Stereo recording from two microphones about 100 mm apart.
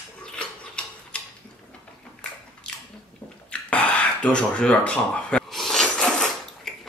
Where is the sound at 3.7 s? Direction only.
15° left (ahead or behind).